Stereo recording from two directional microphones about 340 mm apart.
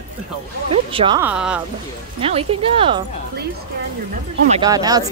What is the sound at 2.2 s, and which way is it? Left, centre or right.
Speech, centre.